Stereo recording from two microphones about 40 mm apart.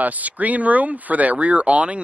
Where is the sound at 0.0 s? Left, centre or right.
Right.